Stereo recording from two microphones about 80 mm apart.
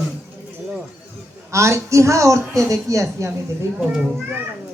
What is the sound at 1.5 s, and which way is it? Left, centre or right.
A man's voice, right.